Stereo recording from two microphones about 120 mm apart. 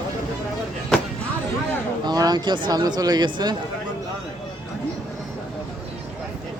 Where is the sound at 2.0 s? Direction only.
35° right (ahead or behind).